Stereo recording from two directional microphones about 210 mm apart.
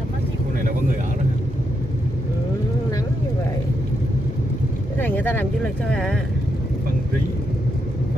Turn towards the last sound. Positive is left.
turn(degrees=5)  # may be behind; listen again after turning